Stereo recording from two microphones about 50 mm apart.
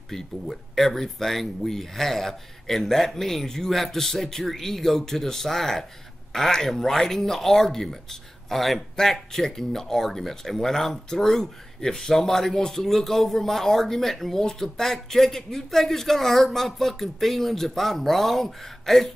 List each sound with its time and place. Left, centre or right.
0.1 s speech: centre